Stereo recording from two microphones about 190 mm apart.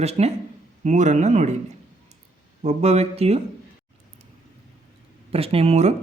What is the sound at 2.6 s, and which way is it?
Speech, 35° right (ahead or behind).